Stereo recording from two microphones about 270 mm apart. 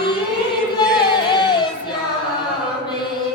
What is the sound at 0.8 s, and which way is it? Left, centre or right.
Music, centre.